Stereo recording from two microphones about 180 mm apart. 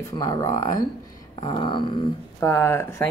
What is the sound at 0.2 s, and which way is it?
Speech, 20° left (ahead or behind).